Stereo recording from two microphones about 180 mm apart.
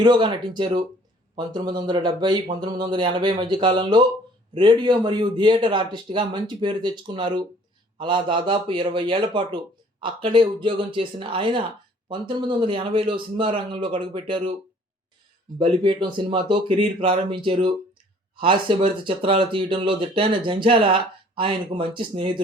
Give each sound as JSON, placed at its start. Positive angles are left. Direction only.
{"t": 0.0, "sound": "speech", "side_deg": -25}
{"t": 15.5, "sound": "speech", "side_deg": -25}